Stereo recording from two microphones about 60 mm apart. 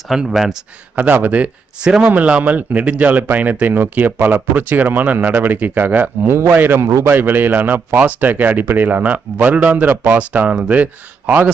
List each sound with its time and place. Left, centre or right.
0.1 s speech: centre
0.9 s a man's voice: right
6.3 s a man's voice: right